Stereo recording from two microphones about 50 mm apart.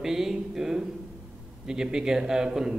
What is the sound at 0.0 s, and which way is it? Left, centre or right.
A man's voice, centre.